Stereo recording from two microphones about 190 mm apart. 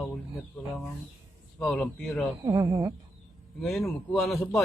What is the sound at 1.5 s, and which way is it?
Speech, 5° left (ahead or behind).